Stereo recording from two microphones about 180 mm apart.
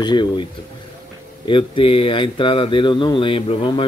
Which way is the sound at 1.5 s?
30° left (ahead or behind).